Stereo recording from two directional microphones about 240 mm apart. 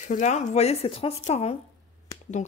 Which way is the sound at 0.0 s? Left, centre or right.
Left.